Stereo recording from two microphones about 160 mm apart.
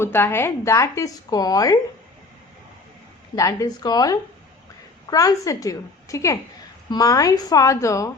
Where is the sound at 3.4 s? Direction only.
20° left (ahead or behind).